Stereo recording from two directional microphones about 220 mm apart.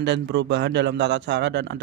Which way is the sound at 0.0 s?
50° right (ahead or behind).